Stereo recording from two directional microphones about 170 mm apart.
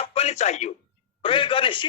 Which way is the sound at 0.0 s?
35° left (ahead or behind).